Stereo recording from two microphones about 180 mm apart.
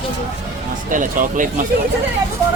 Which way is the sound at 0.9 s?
45° right (ahead or behind).